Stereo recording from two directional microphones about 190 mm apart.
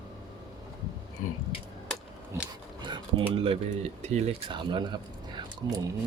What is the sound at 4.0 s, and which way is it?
Speech, 35° right (ahead or behind).